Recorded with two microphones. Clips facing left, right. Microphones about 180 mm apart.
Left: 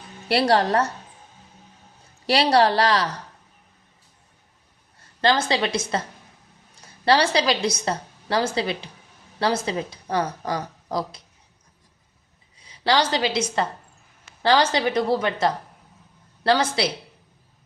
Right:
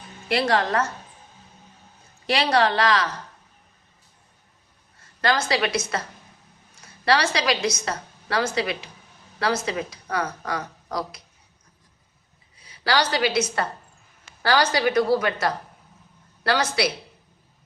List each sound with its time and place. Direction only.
0.3 s a woman's voice: 35° left (ahead or behind)
2.2 s a woman's voice: 35° left (ahead or behind)
5.2 s a woman's voice: 25° left (ahead or behind)
12.8 s a woman's voice: 25° left (ahead or behind)